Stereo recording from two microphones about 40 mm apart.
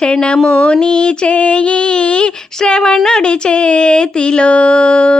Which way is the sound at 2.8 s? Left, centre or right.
Centre.